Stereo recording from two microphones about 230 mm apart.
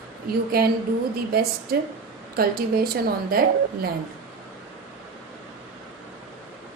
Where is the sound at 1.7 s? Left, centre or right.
Right.